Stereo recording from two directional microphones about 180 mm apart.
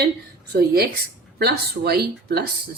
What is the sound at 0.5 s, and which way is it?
Speech, 60° right (ahead or behind).